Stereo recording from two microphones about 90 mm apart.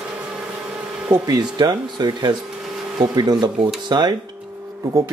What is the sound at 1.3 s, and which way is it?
Speech, 45° right (ahead or behind).